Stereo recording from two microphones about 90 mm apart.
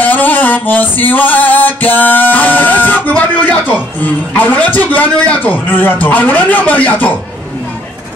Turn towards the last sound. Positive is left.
turn(degrees=15)  # may be behind; listen again after turning